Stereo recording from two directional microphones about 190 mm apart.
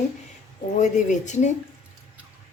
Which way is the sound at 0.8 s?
40° left (ahead or behind).